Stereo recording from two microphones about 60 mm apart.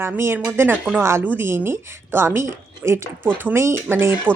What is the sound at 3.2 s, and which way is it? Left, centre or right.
Speech, right.